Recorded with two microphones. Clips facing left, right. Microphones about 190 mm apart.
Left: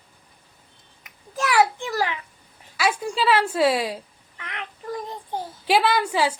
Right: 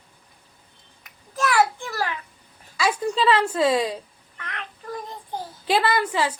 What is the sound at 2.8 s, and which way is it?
Cat, 10° left (ahead or behind).